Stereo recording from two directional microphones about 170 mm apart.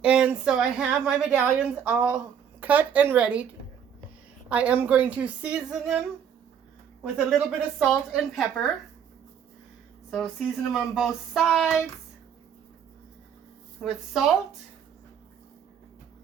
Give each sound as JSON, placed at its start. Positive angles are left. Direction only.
{"t": 0.0, "sound": "a woman's voice", "side_deg": -5}
{"t": 4.4, "sound": "a woman's voice", "side_deg": -5}
{"t": 7.0, "sound": "speech", "side_deg": -5}
{"t": 10.1, "sound": "speech", "side_deg": 0}
{"t": 13.8, "sound": "speech", "side_deg": 0}